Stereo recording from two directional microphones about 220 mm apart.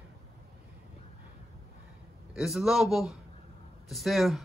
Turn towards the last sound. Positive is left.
turn(degrees=0)  # may be behind; listen again after turning